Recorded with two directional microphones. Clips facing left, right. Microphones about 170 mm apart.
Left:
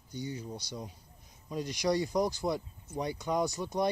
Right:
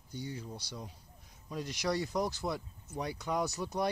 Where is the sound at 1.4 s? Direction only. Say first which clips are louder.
Left 4 dB; centre (ahead or behind).